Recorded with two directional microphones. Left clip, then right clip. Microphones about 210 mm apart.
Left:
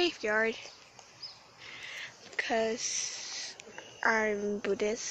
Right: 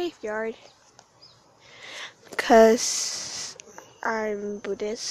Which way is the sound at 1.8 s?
35° right (ahead or behind).